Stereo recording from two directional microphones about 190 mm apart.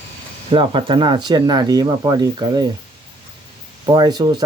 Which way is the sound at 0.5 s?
25° right (ahead or behind).